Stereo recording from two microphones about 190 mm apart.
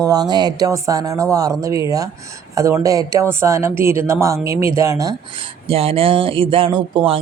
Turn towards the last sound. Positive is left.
turn(degrees=-30)  # may be behind; listen again after turning